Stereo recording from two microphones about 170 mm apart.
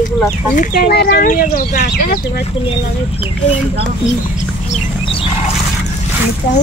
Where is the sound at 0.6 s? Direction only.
65° left (ahead or behind).